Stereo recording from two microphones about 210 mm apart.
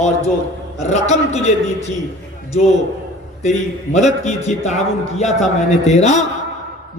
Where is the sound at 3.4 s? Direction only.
35° left (ahead or behind).